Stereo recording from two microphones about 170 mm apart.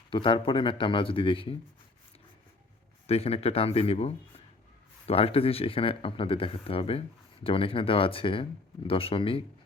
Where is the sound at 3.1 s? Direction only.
35° left (ahead or behind).